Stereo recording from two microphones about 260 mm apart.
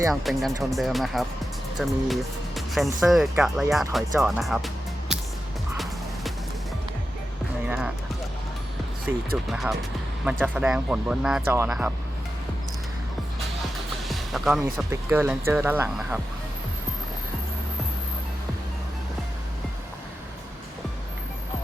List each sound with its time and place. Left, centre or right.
0.1 s speech: centre
5.7 s music: centre
7.7 s speech: centre
9.1 s speech: centre
14.0 s speech: centre